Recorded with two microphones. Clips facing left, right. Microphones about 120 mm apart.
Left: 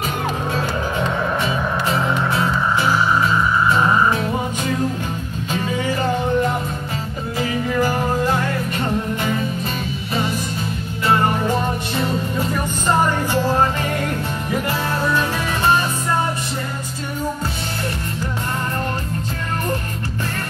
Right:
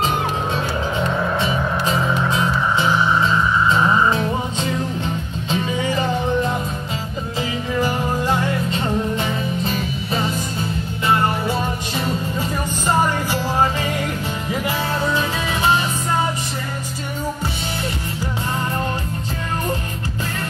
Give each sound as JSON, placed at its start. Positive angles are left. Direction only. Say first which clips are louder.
{"t": 2.0, "sound": "music", "louder": "even", "side_deg": -20}
{"t": 11.4, "sound": "music", "louder": "left 2 dB", "side_deg": -15}